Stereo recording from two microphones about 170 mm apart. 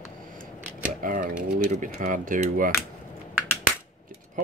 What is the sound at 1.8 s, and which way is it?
Speech, 50° right (ahead or behind).